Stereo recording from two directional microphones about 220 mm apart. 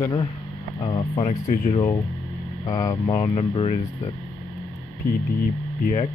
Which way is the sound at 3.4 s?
25° left (ahead or behind).